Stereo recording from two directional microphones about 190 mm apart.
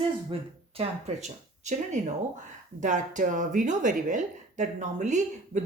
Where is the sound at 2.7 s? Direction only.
40° right (ahead or behind).